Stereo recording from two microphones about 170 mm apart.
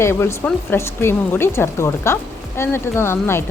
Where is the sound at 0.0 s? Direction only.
15° left (ahead or behind).